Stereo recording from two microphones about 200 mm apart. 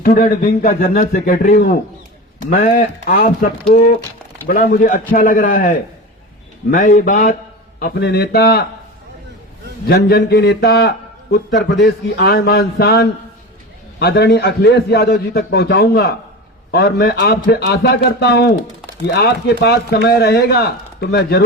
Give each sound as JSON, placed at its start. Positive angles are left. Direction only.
{"t": 0.0, "sound": "a man's voice", "side_deg": 45}
{"t": 9.8, "sound": "a man's voice", "side_deg": 50}